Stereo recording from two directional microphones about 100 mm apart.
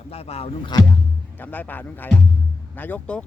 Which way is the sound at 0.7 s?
45° left (ahead or behind).